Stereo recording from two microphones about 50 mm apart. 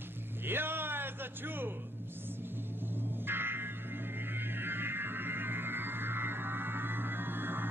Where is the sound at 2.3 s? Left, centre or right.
Right.